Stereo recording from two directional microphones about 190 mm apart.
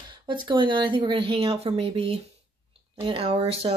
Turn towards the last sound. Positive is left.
turn(degrees=-30)  # may be behind; listen again after turning